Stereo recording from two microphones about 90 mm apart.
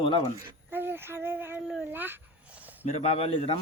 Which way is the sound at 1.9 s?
25° right (ahead or behind).